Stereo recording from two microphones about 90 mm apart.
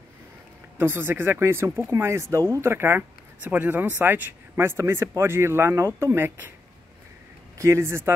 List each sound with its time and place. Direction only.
0.7 s speech: 25° right (ahead or behind)
7.5 s a man's voice: 35° right (ahead or behind)